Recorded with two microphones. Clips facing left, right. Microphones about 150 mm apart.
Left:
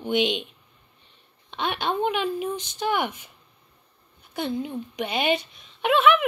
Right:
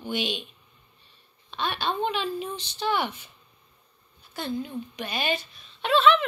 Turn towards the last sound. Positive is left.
turn(degrees=10)  # may be behind; listen again after turning